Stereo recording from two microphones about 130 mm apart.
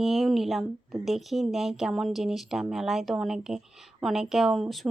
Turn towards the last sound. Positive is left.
turn(degrees=0)  # may be behind; listen again after turning